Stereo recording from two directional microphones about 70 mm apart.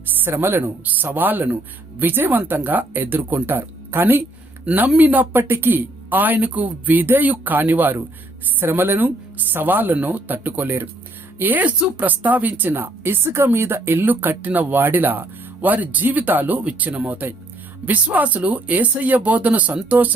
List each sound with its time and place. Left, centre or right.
0.0 s speech: right